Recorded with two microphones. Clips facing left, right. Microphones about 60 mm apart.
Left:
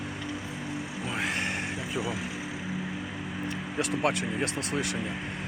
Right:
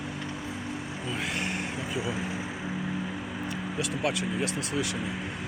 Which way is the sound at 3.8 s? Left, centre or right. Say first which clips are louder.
Left 3 dB; left.